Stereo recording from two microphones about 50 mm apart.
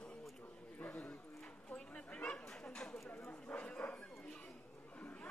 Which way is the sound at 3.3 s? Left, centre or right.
Left.